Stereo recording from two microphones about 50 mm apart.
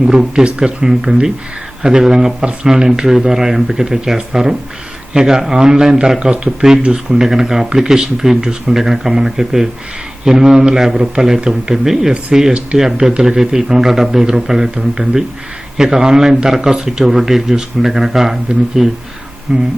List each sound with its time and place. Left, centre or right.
0.0 s speech: centre